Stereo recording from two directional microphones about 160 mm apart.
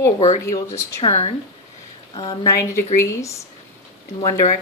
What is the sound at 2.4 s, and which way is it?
Speech, 20° left (ahead or behind).